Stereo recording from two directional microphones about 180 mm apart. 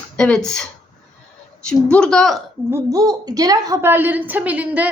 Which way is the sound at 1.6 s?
5° left (ahead or behind).